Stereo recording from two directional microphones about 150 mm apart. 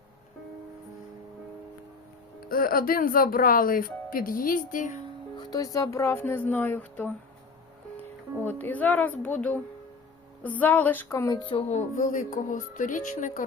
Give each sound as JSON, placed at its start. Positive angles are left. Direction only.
{"t": 2.5, "sound": "speech", "side_deg": 75}
{"t": 5.4, "sound": "speech", "side_deg": 25}
{"t": 8.4, "sound": "speech", "side_deg": 10}
{"t": 11.3, "sound": "speech", "side_deg": 30}
{"t": 11.7, "sound": "speech", "side_deg": 50}